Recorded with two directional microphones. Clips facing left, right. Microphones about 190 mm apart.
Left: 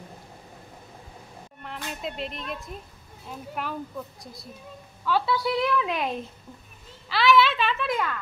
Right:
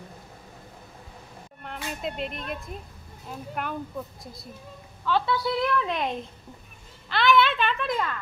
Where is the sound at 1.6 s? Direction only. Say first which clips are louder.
Right 1 dB; centre (ahead or behind).